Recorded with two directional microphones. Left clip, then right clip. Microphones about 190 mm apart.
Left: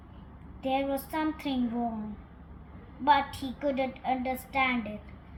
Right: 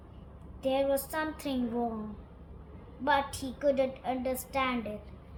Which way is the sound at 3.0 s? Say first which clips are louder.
Left 4 dB; 20° right (ahead or behind).